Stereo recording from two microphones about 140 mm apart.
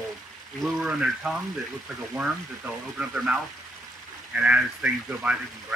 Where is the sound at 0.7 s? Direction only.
5° right (ahead or behind).